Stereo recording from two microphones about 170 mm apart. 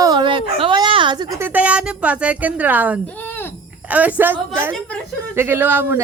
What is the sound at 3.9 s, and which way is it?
Speech, 10° right (ahead or behind).